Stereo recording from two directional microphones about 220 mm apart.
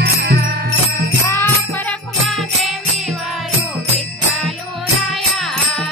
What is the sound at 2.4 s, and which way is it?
Music, centre (ahead or behind).